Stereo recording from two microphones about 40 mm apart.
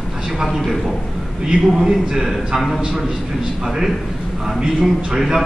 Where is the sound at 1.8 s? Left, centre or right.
Centre.